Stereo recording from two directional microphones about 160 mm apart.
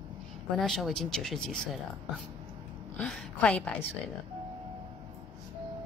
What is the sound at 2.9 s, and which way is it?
Speech, 5° left (ahead or behind).